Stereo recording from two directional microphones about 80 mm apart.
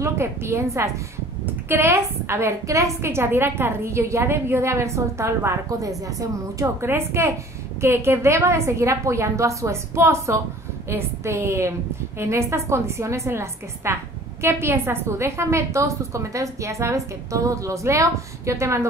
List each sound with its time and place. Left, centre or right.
0.0 s a woman's voice: right
1.4 s a woman's voice: right